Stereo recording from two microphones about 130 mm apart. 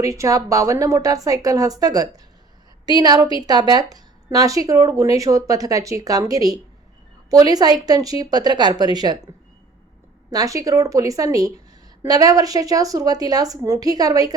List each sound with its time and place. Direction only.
0.0 s speech: 25° right (ahead or behind)
3.4 s a woman's voice: 30° right (ahead or behind)
10.3 s speech: 25° right (ahead or behind)